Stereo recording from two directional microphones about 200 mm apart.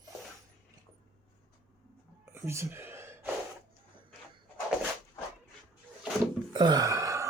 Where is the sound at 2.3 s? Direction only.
10° right (ahead or behind).